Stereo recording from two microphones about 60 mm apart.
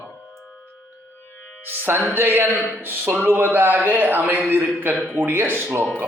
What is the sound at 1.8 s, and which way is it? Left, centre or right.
A man's voice, right.